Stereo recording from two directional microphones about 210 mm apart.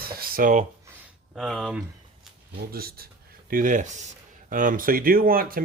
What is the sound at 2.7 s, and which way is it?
Speech, 45° right (ahead or behind).